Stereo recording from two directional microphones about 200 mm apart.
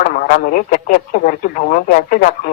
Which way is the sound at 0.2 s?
45° left (ahead or behind).